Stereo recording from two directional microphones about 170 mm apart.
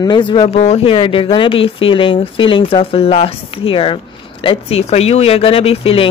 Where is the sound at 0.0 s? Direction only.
25° left (ahead or behind).